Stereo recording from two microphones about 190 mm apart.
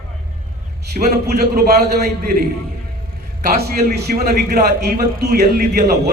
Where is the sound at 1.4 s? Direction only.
55° right (ahead or behind).